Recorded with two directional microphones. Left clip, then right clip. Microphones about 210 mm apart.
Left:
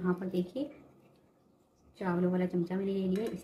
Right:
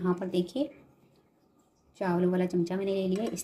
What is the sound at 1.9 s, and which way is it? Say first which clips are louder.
A woman's voice: right 4 dB; 30° right (ahead or behind).